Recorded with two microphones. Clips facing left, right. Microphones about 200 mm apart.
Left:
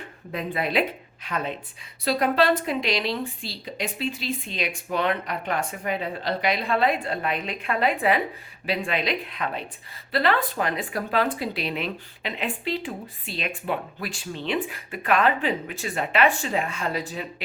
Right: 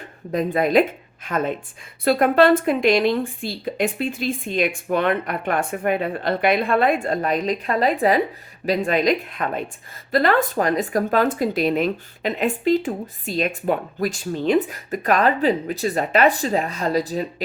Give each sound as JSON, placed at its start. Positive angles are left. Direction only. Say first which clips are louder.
{"t": 0.3, "sound": "speech", "louder": "right 8 dB", "side_deg": -45}